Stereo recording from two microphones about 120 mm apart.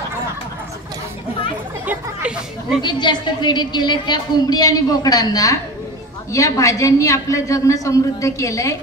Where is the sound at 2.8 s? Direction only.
40° left (ahead or behind).